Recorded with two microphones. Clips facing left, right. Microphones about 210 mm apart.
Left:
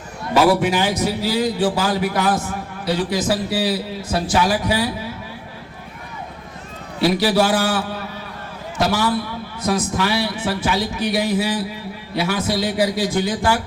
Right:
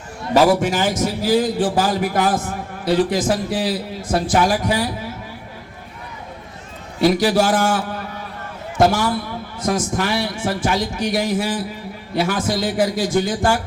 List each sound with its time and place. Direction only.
0.6 s a man's voice: 45° right (ahead or behind)
7.2 s a man's voice: 50° right (ahead or behind)